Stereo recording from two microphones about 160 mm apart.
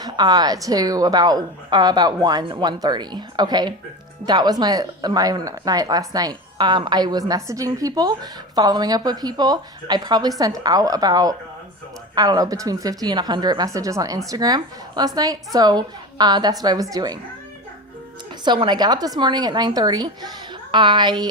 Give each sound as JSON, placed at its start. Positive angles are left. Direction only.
{"t": 0.0, "sound": "a woman's voice", "side_deg": -25}
{"t": 18.4, "sound": "a woman's voice", "side_deg": -30}